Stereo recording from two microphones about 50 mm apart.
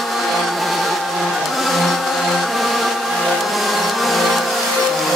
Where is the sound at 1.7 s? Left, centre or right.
Centre.